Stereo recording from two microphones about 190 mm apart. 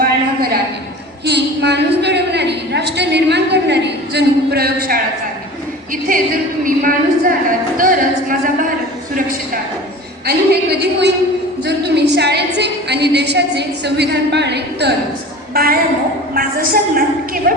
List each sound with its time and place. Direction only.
1.2 s a woman's voice: 60° right (ahead or behind)
7.8 s a sound: 45° right (ahead or behind)
10.2 s a woman's voice: 55° right (ahead or behind)